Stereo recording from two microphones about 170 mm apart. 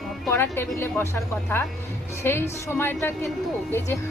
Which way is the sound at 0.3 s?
15° left (ahead or behind).